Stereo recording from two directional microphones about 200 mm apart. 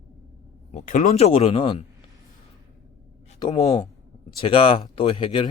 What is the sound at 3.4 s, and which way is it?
Speech, 20° left (ahead or behind).